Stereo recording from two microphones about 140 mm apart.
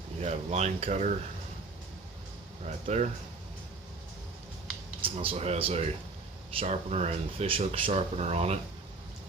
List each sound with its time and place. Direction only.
0.2 s speech: 50° right (ahead or behind)
2.6 s speech: 55° right (ahead or behind)
5.0 s speech: 40° right (ahead or behind)